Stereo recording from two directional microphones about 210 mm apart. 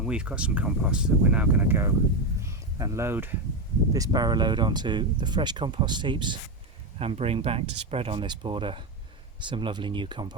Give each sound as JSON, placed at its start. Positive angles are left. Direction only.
{"t": 0.0, "sound": "speech", "side_deg": -5}
{"t": 2.4, "sound": "a sound", "side_deg": -15}
{"t": 3.9, "sound": "speech", "side_deg": -20}